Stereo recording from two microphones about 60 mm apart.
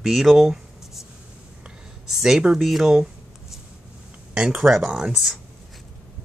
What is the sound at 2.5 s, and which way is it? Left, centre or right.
Speech, centre.